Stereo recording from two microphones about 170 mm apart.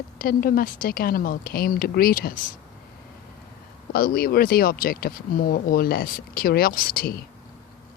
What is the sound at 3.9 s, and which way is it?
Speech, 60° left (ahead or behind).